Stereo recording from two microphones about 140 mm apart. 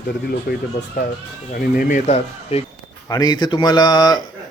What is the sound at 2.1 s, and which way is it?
Speech, 45° left (ahead or behind).